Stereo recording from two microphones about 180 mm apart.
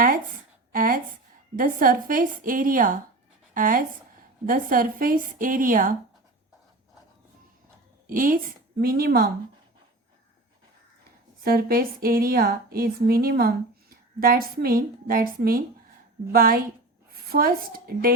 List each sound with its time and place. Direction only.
0.7 s a sound: 50° right (ahead or behind)
1.5 s a woman's voice: 50° right (ahead or behind)
8.0 s a woman's voice: 50° right (ahead or behind)
11.3 s a woman's voice: 55° right (ahead or behind)